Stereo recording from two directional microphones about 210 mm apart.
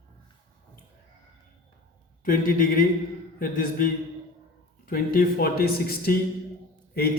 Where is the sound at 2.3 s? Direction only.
45° left (ahead or behind).